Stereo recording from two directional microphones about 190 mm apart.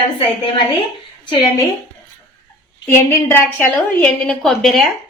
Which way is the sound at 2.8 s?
10° left (ahead or behind).